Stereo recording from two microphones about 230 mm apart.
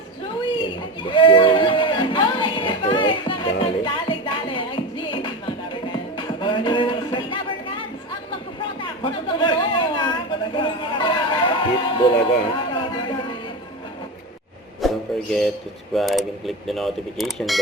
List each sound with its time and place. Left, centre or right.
1.0 s a sound: left
6.1 s music: left
9.0 s chatter: left
10.5 s a sound: left
14.8 s music: centre
16.0 s speech: centre